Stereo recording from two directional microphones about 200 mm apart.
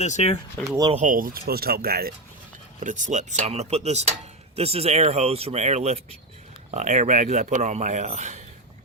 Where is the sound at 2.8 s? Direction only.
40° right (ahead or behind).